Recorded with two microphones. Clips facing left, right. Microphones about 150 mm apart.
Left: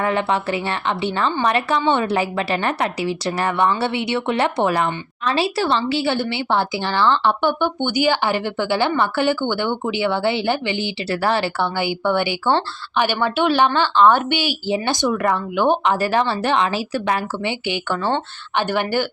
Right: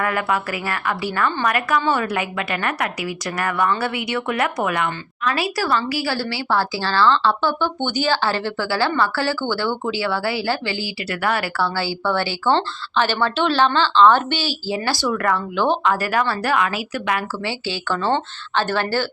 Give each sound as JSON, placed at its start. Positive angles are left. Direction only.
{"t": 0.0, "sound": "speech", "side_deg": 25}
{"t": 17.4, "sound": "speech", "side_deg": 15}